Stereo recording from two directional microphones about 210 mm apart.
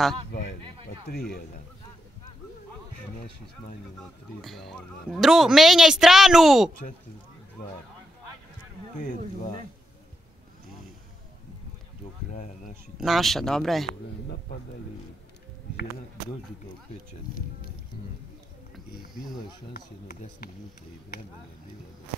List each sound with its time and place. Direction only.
4.4 s speech: centre (ahead or behind)
12.3 s speech: 35° left (ahead or behind)
13.0 s speech: centre (ahead or behind)
19.7 s speech: 45° left (ahead or behind)